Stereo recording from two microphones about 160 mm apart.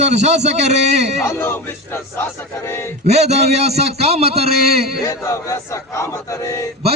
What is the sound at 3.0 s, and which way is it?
A man's voice, 45° right (ahead or behind).